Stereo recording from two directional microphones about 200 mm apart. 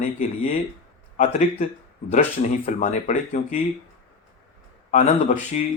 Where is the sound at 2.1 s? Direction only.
35° left (ahead or behind).